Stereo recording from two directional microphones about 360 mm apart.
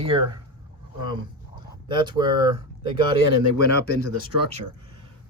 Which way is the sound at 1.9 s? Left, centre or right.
Centre.